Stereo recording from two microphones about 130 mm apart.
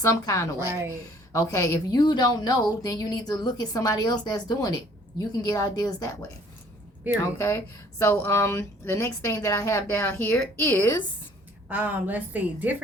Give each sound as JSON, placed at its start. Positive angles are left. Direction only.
{"t": 0.0, "sound": "a woman's voice", "side_deg": 25}
{"t": 11.7, "sound": "a woman's voice", "side_deg": -15}